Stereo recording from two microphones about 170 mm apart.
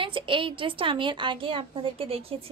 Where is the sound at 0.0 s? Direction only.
30° right (ahead or behind).